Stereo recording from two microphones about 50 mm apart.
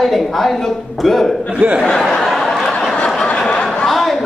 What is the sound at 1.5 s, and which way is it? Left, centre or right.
Speech, right.